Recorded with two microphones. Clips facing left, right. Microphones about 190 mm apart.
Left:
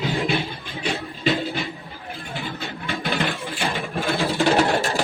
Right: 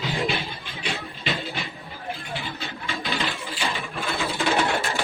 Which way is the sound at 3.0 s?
55° left (ahead or behind).